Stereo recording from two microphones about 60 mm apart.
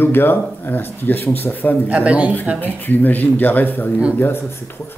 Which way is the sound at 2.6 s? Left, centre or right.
Left.